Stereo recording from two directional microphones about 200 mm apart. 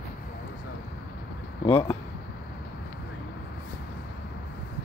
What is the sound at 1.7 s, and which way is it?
Speech, 25° left (ahead or behind).